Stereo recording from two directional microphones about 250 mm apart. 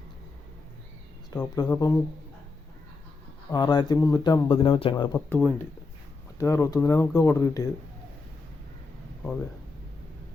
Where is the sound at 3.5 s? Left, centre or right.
Centre.